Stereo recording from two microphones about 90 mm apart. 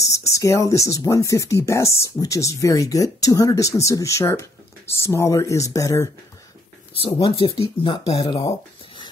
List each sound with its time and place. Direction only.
0.0 s speech: 35° left (ahead or behind)
6.9 s speech: 90° left